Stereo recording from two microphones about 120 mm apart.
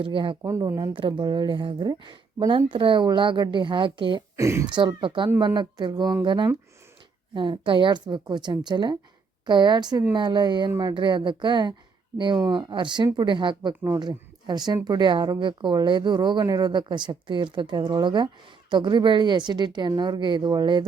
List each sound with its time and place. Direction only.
0.0 s a woman's voice: 45° right (ahead or behind)
0.4 s speech: 25° right (ahead or behind)
0.9 s speech: 45° right (ahead or behind)
2.6 s a woman's voice: 45° right (ahead or behind)
4.4 s speech: 25° right (ahead or behind)
4.6 s speech: 40° right (ahead or behind)